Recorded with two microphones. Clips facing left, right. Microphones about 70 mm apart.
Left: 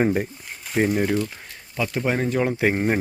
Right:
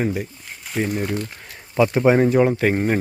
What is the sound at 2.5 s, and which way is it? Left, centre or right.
Speech, centre.